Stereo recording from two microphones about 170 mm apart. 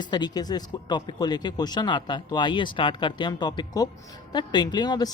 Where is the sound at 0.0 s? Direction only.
25° left (ahead or behind).